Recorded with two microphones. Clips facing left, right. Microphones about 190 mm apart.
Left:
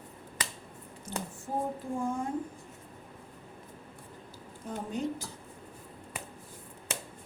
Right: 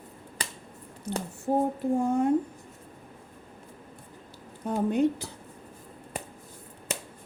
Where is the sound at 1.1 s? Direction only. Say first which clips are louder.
Right 9 dB; 65° right (ahead or behind).